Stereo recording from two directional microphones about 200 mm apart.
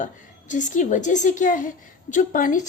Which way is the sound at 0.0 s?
40° left (ahead or behind).